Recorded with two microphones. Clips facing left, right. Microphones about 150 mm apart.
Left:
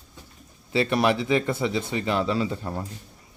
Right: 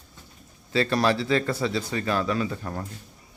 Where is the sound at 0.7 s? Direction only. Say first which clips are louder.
Left 1 dB; 20° left (ahead or behind).